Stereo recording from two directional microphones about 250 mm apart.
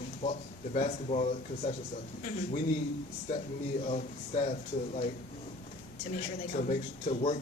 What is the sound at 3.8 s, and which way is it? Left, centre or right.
Speech, left.